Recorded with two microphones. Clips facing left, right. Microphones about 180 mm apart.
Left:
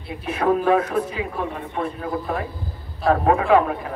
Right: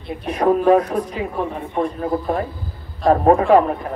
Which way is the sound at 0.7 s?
35° right (ahead or behind).